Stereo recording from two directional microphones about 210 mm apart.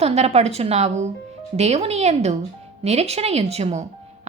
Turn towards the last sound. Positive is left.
turn(degrees=-30)  # may be behind; listen again after turning